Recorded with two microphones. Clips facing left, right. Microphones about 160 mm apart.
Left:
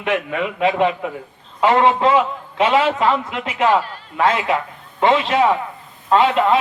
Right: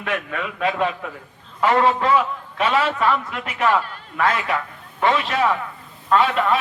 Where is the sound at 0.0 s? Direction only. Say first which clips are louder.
Left 5 dB; 20° left (ahead or behind).